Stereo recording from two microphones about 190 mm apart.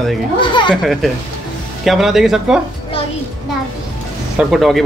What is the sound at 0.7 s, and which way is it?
A man's voice, centre (ahead or behind).